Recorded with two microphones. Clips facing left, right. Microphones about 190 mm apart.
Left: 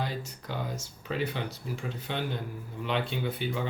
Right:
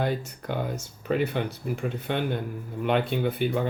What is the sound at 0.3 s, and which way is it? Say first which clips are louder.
Speech: right 5 dB; 55° right (ahead or behind).